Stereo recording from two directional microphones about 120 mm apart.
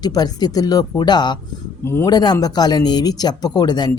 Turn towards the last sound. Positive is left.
turn(degrees=35)  # may be behind; listen again after turning